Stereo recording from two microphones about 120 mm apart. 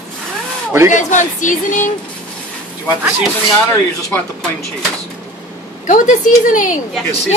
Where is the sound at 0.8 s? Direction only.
90° left.